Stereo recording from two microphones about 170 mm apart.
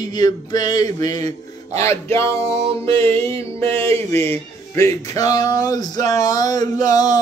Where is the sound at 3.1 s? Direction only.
35° right (ahead or behind).